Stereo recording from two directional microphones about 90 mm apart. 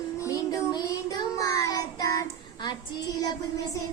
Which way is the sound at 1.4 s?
40° left (ahead or behind).